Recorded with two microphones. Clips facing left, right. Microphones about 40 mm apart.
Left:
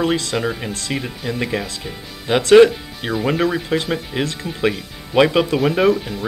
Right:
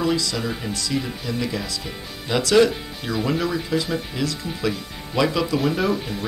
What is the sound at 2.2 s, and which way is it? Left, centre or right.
Speech, left.